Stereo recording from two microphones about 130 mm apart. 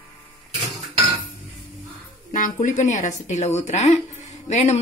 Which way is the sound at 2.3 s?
85° left.